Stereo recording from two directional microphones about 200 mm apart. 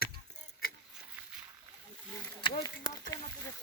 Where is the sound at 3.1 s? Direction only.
15° left (ahead or behind).